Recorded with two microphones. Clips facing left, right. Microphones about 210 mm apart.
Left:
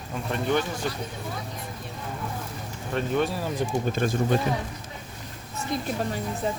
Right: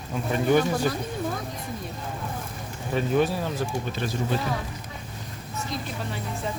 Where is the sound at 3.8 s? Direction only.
50° left (ahead or behind).